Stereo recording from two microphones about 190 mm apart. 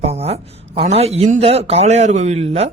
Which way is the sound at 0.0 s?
35° right (ahead or behind).